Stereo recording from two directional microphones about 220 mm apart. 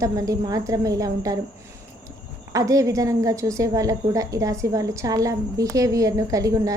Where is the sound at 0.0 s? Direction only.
15° right (ahead or behind).